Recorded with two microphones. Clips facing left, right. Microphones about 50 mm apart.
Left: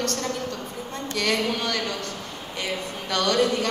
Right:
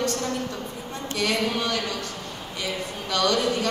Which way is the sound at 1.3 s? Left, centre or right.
Left.